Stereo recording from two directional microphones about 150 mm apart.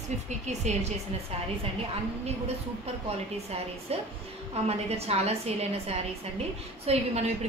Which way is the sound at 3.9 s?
40° right (ahead or behind).